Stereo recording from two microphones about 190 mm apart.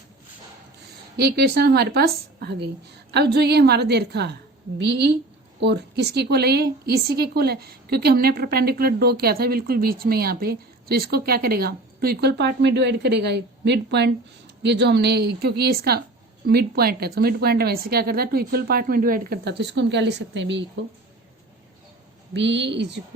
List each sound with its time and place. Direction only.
1.1 s a woman's voice: 55° right (ahead or behind)
22.3 s a woman's voice: 70° right (ahead or behind)